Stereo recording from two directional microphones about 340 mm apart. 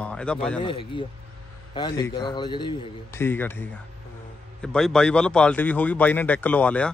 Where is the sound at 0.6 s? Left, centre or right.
Centre.